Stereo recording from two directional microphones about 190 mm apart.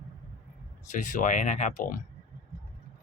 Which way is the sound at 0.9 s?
40° left (ahead or behind).